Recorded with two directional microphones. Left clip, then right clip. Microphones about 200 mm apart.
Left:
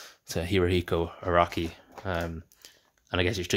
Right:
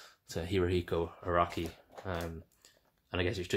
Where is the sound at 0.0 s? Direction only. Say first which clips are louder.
Left 7 dB; 40° left (ahead or behind).